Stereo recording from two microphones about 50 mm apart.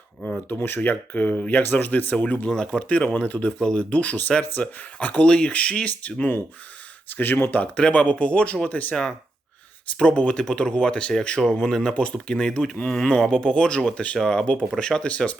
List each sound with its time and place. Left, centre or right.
0.8 s speech: left
7.1 s speech: left
7.6 s speech: left